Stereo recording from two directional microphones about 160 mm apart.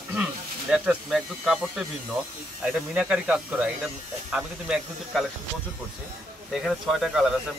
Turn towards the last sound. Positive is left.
turn(degrees=0)  # may be behind; listen again after turning